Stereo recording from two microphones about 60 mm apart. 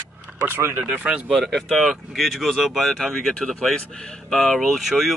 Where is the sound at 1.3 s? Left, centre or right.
Centre.